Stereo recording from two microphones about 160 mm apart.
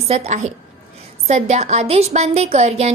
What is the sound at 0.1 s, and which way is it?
A woman's voice, 45° right (ahead or behind).